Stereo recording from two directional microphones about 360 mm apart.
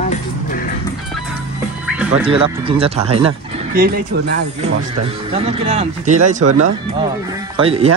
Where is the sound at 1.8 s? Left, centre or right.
Centre.